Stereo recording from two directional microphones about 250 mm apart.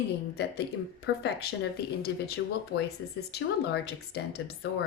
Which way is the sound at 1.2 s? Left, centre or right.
Left.